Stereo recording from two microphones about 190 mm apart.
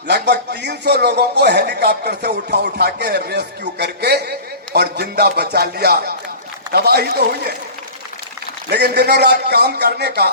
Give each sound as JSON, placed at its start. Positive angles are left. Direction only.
{"t": 0.1, "sound": "a man's voice", "side_deg": -65}
{"t": 8.7, "sound": "a man's voice", "side_deg": -60}